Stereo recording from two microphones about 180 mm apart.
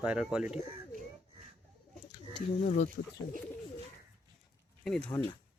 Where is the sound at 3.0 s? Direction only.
55° left (ahead or behind).